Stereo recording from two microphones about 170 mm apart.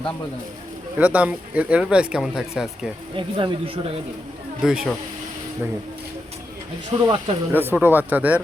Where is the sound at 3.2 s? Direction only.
30° right (ahead or behind).